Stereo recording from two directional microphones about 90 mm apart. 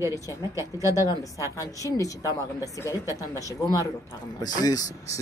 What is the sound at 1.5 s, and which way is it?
A woman's voice, 35° left (ahead or behind).